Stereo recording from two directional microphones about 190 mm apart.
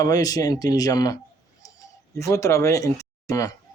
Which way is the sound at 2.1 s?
15° left (ahead or behind).